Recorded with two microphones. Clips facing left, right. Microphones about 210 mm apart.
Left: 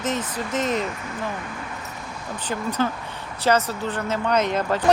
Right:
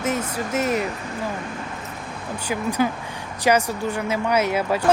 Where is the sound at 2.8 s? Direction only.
10° right (ahead or behind).